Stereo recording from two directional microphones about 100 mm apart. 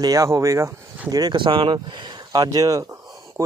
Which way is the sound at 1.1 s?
45° right (ahead or behind).